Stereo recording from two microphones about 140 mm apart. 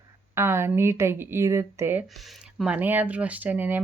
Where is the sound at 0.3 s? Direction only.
15° right (ahead or behind).